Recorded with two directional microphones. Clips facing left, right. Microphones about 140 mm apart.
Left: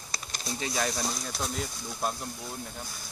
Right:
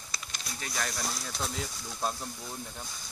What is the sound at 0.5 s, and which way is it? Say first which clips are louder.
Speech: left 6 dB; 20° left (ahead or behind).